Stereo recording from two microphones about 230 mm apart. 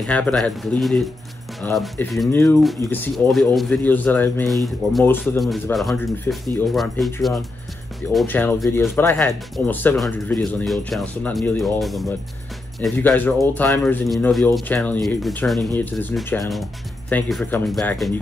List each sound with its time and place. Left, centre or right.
0.0 s speech: centre
8.1 s speech: centre